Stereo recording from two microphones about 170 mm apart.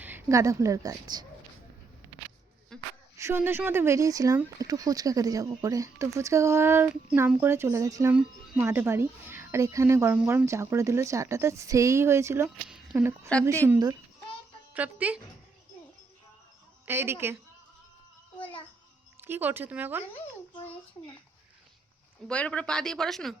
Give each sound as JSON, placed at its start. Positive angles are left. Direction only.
{"t": 0.0, "sound": "a woman's voice", "side_deg": -15}
{"t": 3.2, "sound": "a woman's voice", "side_deg": -15}
{"t": 12.6, "sound": "a sound", "side_deg": -5}
{"t": 13.0, "sound": "a woman's voice", "side_deg": -15}
{"t": 14.7, "sound": "speech", "side_deg": -10}
{"t": 16.8, "sound": "a woman's voice", "side_deg": -15}
{"t": 19.2, "sound": "a woman's voice", "side_deg": -10}
{"t": 22.3, "sound": "speech", "side_deg": 5}